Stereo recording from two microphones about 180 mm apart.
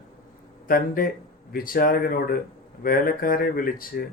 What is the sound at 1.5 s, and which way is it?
Speech, 50° left (ahead or behind).